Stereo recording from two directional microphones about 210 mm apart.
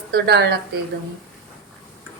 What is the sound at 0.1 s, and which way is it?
Speech, 50° right (ahead or behind).